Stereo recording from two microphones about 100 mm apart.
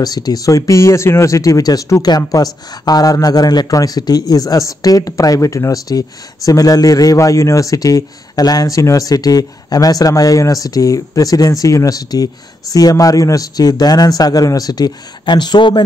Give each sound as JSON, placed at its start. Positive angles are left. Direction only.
{"t": 0.0, "sound": "speech", "side_deg": 40}